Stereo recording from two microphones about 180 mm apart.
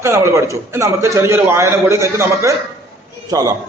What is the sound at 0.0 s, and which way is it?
A man's voice, 15° right (ahead or behind).